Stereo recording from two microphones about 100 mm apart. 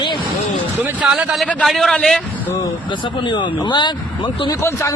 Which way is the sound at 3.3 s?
50° left (ahead or behind).